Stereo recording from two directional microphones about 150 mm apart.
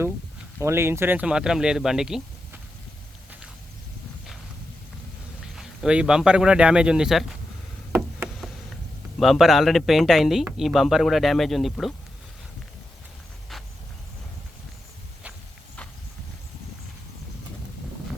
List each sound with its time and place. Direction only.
0.6 s speech: 15° right (ahead or behind)
5.5 s speech: 5° right (ahead or behind)
8.2 s knock: 20° right (ahead or behind)
9.1 s speech: centre (ahead or behind)